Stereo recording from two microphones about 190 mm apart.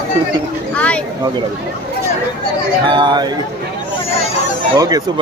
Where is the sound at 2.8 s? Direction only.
25° right (ahead or behind).